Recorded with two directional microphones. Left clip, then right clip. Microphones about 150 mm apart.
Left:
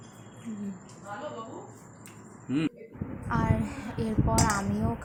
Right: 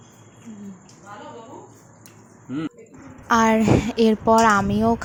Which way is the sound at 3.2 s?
65° right (ahead or behind).